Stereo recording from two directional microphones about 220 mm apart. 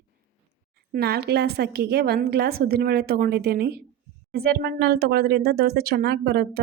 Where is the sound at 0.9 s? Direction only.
45° right (ahead or behind).